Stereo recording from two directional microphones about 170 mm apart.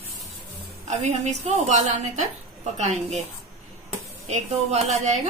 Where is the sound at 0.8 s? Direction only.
45° right (ahead or behind).